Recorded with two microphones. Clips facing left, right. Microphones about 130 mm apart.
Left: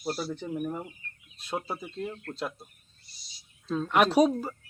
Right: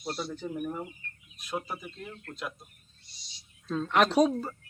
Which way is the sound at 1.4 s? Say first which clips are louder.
Left 2 dB; 30° left (ahead or behind).